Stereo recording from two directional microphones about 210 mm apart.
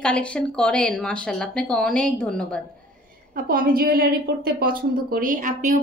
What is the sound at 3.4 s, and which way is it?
A woman's voice, 45° right (ahead or behind).